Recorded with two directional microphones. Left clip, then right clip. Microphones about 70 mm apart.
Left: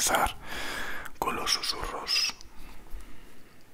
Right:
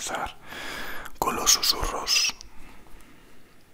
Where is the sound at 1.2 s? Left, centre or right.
Right.